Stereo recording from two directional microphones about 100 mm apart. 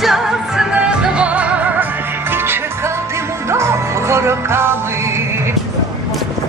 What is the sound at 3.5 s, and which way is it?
Music, 25° right (ahead or behind).